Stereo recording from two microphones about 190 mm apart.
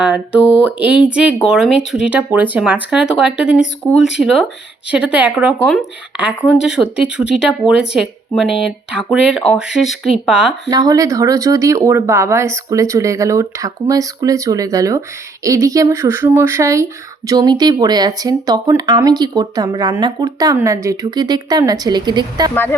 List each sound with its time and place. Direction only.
0.6 s speech: 5° right (ahead or behind)
10.7 s speech: 20° right (ahead or behind)